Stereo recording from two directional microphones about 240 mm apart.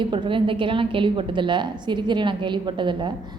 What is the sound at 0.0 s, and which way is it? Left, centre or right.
A woman's voice, centre.